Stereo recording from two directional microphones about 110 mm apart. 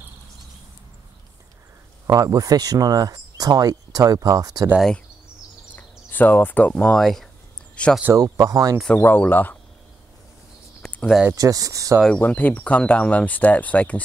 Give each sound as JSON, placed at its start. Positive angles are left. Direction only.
{"t": 2.0, "sound": "speech", "side_deg": -30}
{"t": 5.8, "sound": "speech", "side_deg": 15}
{"t": 8.2, "sound": "speech", "side_deg": -35}
{"t": 8.8, "sound": "speech", "side_deg": 20}
{"t": 10.8, "sound": "a sound", "side_deg": 10}
{"t": 11.3, "sound": "speech", "side_deg": -30}
{"t": 12.2, "sound": "speech", "side_deg": 15}